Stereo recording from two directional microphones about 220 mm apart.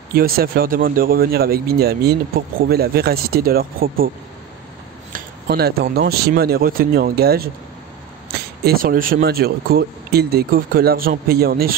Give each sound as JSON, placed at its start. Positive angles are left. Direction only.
{"t": 0.1, "sound": "speech", "side_deg": -45}
{"t": 5.1, "sound": "speech", "side_deg": -45}